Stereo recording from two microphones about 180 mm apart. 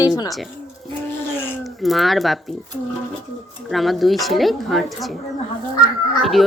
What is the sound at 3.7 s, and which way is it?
A woman's voice, centre (ahead or behind).